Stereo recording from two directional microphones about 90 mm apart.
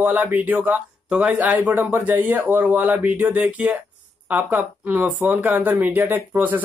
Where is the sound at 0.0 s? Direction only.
20° right (ahead or behind).